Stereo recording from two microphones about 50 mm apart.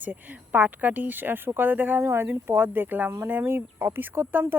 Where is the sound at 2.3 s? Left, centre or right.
Right.